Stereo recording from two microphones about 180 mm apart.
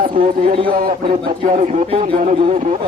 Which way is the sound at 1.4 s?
40° right (ahead or behind).